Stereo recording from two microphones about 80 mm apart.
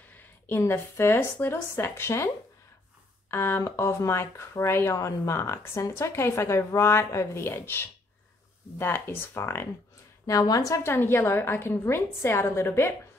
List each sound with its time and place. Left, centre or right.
0.1 s a woman's voice: left
10.2 s a woman's voice: left
10.8 s a woman's voice: left